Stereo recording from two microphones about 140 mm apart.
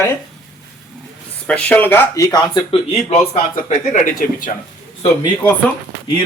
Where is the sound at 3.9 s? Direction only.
75° left (ahead or behind).